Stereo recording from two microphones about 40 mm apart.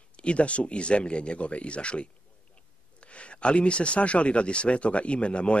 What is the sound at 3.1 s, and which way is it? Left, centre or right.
Speech, left.